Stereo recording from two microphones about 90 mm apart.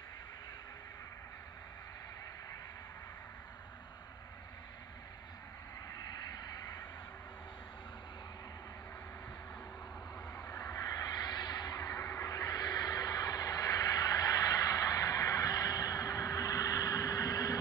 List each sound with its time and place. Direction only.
5.9 s vehicle: 45° left (ahead or behind)
10.4 s vehicle: 40° left (ahead or behind)